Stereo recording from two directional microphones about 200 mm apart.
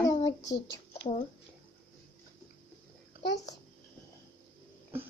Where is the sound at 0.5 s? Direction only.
60° left (ahead or behind).